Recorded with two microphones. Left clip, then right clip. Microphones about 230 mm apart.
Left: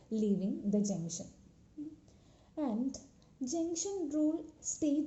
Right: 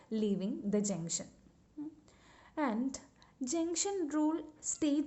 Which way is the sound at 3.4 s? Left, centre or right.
Right.